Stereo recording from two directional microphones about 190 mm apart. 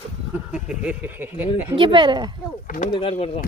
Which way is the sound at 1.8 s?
25° right (ahead or behind).